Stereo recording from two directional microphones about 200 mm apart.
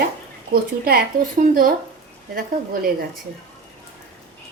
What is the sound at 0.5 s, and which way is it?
A woman's voice, 50° right (ahead or behind).